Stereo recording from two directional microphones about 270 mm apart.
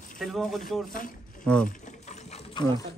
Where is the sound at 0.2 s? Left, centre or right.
Centre.